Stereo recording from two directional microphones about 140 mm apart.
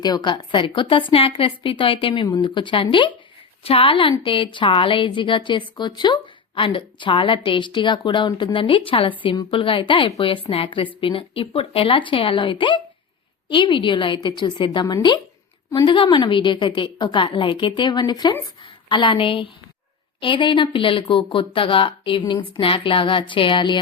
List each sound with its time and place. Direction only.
0.0 s a woman's voice: 30° left (ahead or behind)